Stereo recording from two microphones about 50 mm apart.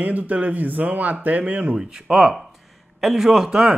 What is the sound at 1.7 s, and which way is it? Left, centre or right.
A man's voice, centre.